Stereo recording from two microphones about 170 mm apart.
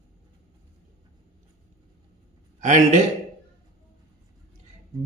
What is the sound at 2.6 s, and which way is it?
Speech, 45° right (ahead or behind).